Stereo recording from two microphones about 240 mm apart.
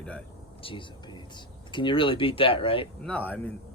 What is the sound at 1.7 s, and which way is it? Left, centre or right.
Speech, centre.